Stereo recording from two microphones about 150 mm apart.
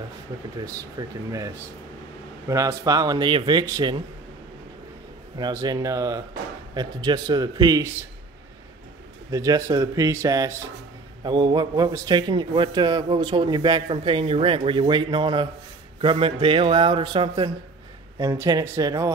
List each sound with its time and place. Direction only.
0.7 s speech: 25° right (ahead or behind)
5.4 s speech: 25° right (ahead or behind)
9.3 s a man's voice: 20° right (ahead or behind)